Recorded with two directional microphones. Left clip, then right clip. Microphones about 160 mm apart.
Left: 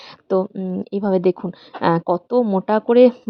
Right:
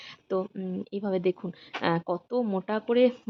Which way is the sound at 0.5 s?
20° left (ahead or behind).